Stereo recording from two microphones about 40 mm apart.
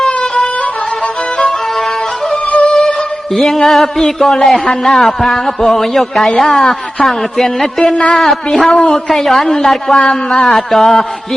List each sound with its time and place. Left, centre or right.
0.0 s yodeling: centre
2.3 s music: left
2.6 s music: centre
3.3 s a man's voice: centre
8.7 s a woman's voice: left
9.0 s a man's voice: centre
10.4 s a woman's voice: centre